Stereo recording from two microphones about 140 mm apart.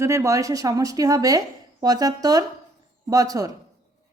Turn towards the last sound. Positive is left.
turn(degrees=-25)  # may be behind; listen again after turning